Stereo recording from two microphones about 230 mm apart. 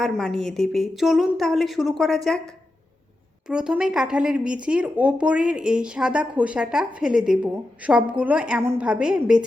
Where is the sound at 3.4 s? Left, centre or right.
Centre.